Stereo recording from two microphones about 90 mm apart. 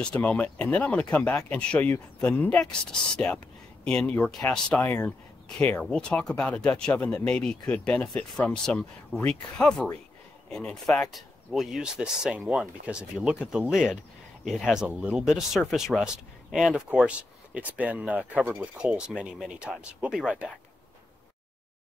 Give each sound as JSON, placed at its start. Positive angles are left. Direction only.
{"t": 0.0, "sound": "speech", "side_deg": 15}
{"t": 3.8, "sound": "speech", "side_deg": 10}
{"t": 4.8, "sound": "speech", "side_deg": 20}
{"t": 17.6, "sound": "speech", "side_deg": -15}